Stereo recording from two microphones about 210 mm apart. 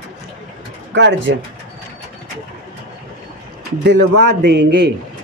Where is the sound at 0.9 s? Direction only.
55° right (ahead or behind).